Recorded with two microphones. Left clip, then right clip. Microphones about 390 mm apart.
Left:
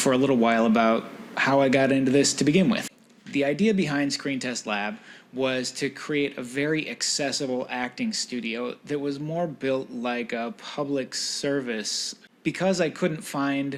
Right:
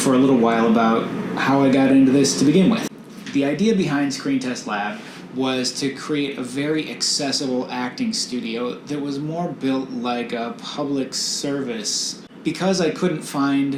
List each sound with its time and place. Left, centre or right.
0.0 s speech: left
5.4 s speech: left